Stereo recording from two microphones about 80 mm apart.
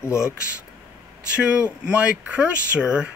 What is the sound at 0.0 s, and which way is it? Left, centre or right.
Speech, left.